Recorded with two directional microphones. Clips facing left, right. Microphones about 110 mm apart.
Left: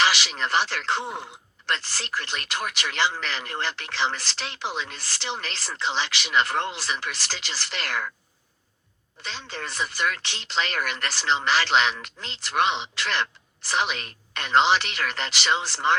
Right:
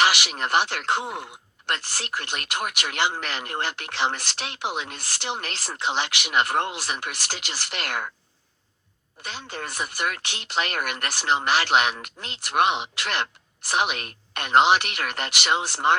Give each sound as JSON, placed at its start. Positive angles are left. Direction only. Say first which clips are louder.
{"t": 0.0, "sound": "speech", "louder": "right 1 dB", "side_deg": -50}
{"t": 1.0, "sound": "speech", "louder": "right 1 dB", "side_deg": -10}
{"t": 1.6, "sound": "speech", "louder": "even", "side_deg": -55}
{"t": 9.5, "sound": "speech", "louder": "left 1 dB", "side_deg": -50}